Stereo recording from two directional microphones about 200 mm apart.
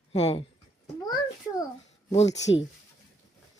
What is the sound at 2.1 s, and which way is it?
Speech, 30° left (ahead or behind).